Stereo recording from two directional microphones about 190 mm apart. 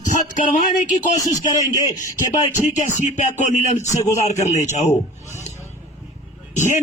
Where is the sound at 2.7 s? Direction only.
40° left (ahead or behind).